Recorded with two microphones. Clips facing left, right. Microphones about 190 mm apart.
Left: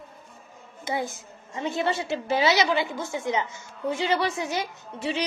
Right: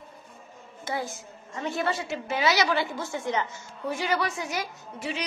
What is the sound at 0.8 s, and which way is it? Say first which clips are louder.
A woman's voice: left 3 dB; 20° left (ahead or behind).